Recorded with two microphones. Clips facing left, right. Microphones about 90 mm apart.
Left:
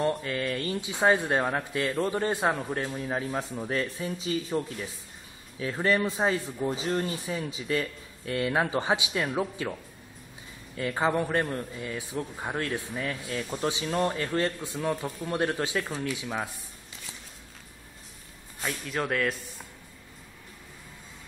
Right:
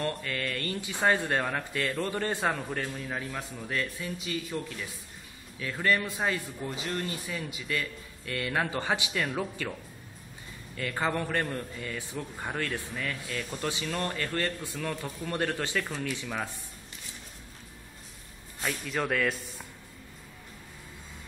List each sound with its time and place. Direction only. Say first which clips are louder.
0.0 s speech: left 5 dB; 15° left (ahead or behind)
3.0 s a man's voice: left 5 dB; 30° left (ahead or behind)
10.8 s a man's voice: left 4 dB; 15° left (ahead or behind)
18.6 s speech: even; 5° left (ahead or behind)